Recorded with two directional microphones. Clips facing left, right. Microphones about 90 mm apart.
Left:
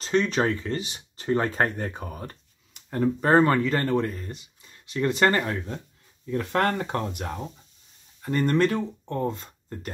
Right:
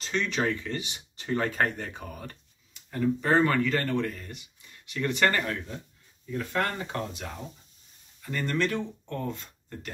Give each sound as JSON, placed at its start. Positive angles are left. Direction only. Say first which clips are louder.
{"t": 0.0, "sound": "speech", "louder": "left 5 dB", "side_deg": 40}
{"t": 2.7, "sound": "speech", "louder": "left 2 dB", "side_deg": 45}
{"t": 6.3, "sound": "speech", "louder": "left 5 dB", "side_deg": 65}
{"t": 8.2, "sound": "speech", "louder": "left 7 dB", "side_deg": 40}
{"t": 9.1, "sound": "speech", "louder": "left 6 dB", "side_deg": 30}